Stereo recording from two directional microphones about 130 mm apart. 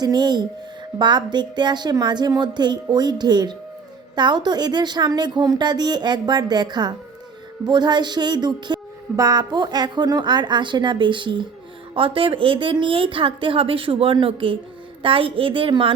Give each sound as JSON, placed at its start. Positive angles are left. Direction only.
{"t": 0.0, "sound": "a woman's voice", "side_deg": -30}